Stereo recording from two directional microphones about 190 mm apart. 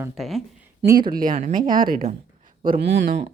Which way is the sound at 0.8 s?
20° right (ahead or behind).